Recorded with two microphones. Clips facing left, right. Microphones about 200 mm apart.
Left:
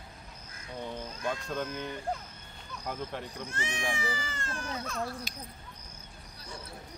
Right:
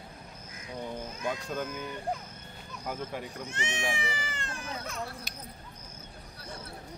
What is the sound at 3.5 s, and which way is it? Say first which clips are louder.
Speech: right 1 dB; 20° right (ahead or behind).